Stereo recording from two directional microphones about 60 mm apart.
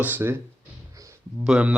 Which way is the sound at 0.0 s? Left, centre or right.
Right.